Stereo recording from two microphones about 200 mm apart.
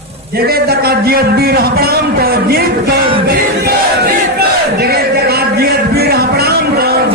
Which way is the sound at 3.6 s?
50° right (ahead or behind).